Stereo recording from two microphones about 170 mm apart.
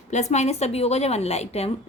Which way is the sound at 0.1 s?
45° left (ahead or behind).